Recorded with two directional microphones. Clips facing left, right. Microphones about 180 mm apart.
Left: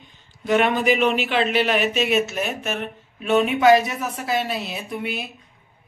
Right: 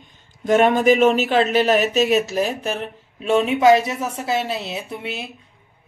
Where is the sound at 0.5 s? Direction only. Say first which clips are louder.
Right 4 dB; 45° right (ahead or behind).